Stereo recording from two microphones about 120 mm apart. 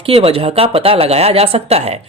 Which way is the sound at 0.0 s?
55° right (ahead or behind).